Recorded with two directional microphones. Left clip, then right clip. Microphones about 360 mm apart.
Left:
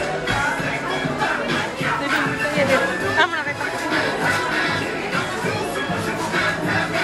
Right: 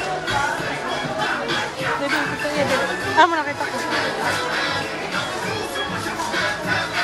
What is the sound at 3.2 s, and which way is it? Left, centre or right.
Music, centre.